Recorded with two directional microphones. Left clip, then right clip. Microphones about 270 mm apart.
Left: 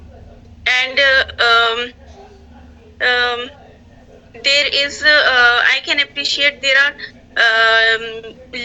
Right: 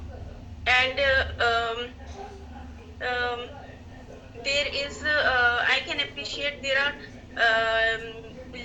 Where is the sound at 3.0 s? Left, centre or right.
Left.